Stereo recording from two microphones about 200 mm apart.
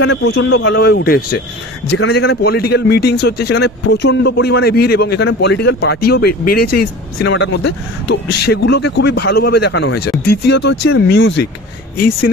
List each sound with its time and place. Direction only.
0.0 s a man's voice: 60° left (ahead or behind)